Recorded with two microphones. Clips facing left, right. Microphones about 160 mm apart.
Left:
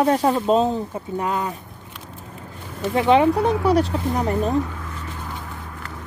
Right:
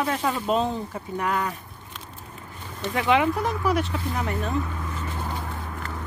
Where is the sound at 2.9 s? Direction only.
30° left (ahead or behind).